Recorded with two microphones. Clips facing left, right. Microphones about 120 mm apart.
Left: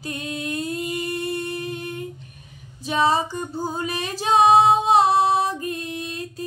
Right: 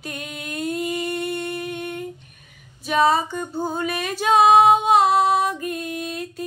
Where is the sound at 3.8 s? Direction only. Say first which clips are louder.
Right 2 dB; 30° left (ahead or behind).